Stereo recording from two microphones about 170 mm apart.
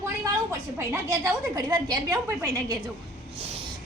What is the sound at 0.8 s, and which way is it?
A woman's voice, 20° right (ahead or behind).